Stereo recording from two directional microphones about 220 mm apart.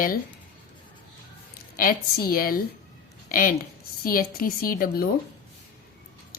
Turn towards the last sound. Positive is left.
turn(degrees=40)  # may be behind; listen again after turning